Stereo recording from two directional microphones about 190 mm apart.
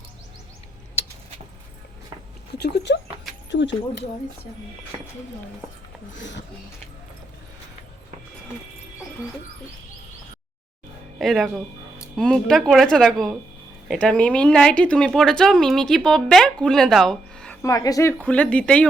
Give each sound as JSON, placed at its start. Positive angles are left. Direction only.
{"t": 2.5, "sound": "speech", "side_deg": 60}
{"t": 6.1, "sound": "speech", "side_deg": 70}
{"t": 11.2, "sound": "speech", "side_deg": 0}
{"t": 17.6, "sound": "speech", "side_deg": 20}
{"t": 18.2, "sound": "speech", "side_deg": 5}